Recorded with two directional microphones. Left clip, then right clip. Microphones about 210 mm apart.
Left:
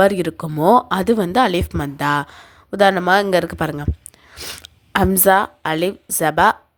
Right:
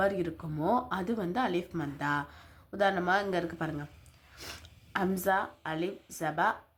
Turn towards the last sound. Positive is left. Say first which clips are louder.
# left 15 dB
turn(degrees=45)  # may be behind; listen again after turning